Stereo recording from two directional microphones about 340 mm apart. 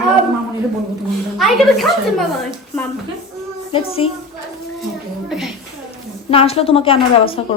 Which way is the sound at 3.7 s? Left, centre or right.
Centre.